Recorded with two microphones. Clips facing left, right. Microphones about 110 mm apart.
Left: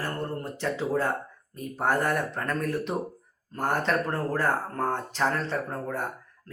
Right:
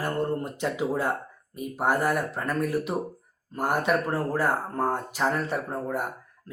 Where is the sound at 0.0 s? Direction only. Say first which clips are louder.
Right 4 dB; 15° right (ahead or behind).